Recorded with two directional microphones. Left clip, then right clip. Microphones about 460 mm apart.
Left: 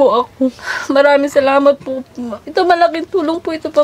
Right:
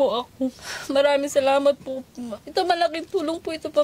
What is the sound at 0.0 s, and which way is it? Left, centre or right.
Speech, right.